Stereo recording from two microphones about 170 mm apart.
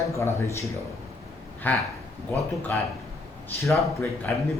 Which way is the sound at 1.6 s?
10° left (ahead or behind).